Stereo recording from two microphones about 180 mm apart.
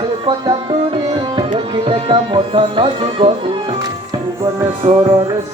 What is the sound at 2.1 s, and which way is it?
Music, 25° right (ahead or behind).